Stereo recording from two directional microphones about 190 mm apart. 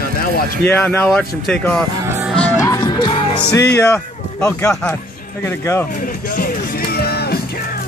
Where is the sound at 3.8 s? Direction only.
15° left (ahead or behind).